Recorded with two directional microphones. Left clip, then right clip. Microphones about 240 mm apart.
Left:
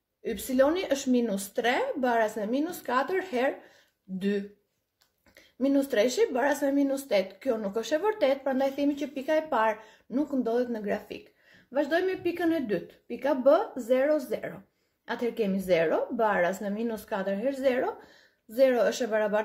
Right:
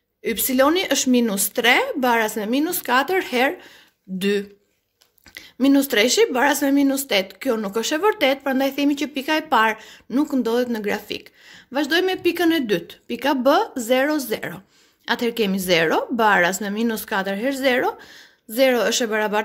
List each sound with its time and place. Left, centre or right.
0.2 s speech: right